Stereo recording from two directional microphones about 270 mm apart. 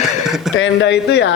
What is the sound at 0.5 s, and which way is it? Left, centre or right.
Speech, left.